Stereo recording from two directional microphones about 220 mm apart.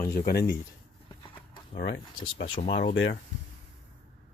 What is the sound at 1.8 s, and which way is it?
Speech, 60° left (ahead or behind).